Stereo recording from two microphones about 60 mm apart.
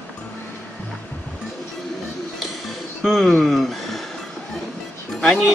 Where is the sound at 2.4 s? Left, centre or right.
Centre.